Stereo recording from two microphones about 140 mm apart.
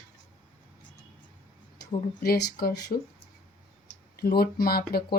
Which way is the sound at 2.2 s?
90° left.